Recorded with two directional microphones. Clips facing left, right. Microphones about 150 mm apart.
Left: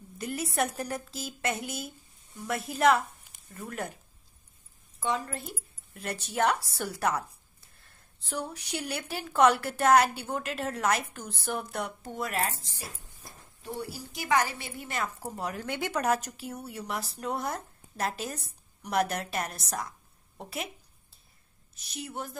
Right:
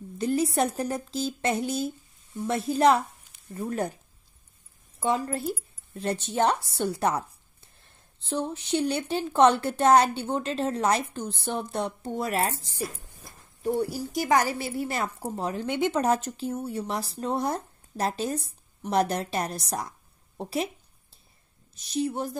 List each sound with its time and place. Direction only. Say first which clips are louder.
0.2 s a woman's voice: right 6 dB; 30° right (ahead or behind)
5.0 s a woman's voice: right 5 dB; 40° right (ahead or behind)
5.9 s a woman's voice: right 4 dB; 30° right (ahead or behind)
8.3 s a woman's voice: right 7 dB; 25° right (ahead or behind)
13.6 s a woman's voice: right 11 dB; 45° right (ahead or behind); by 20.7 s 30° right (ahead or behind)
21.7 s a woman's voice: right 10 dB; 30° right (ahead or behind)